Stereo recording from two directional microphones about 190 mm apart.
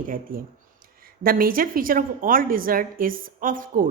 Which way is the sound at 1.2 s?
50° right (ahead or behind).